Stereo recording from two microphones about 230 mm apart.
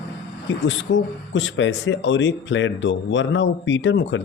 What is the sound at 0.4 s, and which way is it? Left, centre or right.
Speech, left.